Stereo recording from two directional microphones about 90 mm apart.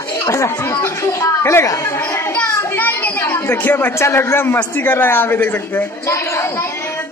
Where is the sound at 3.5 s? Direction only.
20° left (ahead or behind).